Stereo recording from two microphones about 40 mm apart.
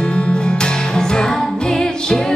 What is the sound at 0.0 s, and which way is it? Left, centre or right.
Music, left.